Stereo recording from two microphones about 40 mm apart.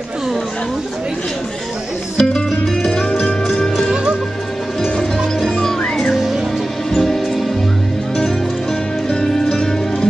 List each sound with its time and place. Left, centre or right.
2.1 s music: centre
3.9 s music: right
4.8 s music: centre
5.6 s music: centre
5.9 s music: centre
9.1 s music: centre